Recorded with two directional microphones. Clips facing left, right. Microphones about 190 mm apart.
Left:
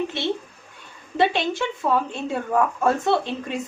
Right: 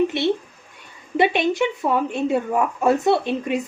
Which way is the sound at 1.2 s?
20° right (ahead or behind).